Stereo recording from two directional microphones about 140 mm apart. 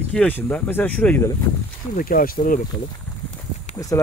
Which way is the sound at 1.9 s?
90° left.